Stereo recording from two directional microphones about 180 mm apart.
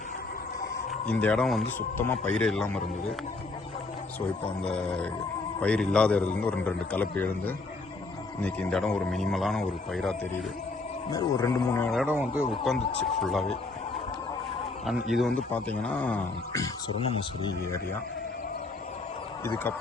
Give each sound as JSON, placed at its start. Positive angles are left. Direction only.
{"t": 1.0, "sound": "a man's voice", "side_deg": 5}
{"t": 4.6, "sound": "a man's voice", "side_deg": 5}
{"t": 11.1, "sound": "a man's voice", "side_deg": 20}
{"t": 11.9, "sound": "a man's voice", "side_deg": 0}
{"t": 14.8, "sound": "a man's voice", "side_deg": 0}
{"t": 17.0, "sound": "speech", "side_deg": 30}